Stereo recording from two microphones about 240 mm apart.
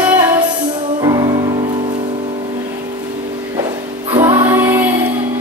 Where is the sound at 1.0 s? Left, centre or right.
Centre.